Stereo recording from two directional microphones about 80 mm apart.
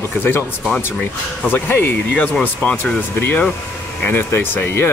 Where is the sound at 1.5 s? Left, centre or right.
Left.